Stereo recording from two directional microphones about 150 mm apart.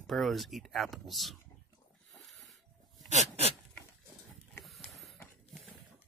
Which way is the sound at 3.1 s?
45° right (ahead or behind).